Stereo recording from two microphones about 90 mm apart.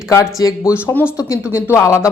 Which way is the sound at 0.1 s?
40° left (ahead or behind).